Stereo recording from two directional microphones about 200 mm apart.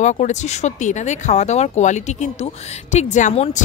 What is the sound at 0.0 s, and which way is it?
Speech, 35° left (ahead or behind).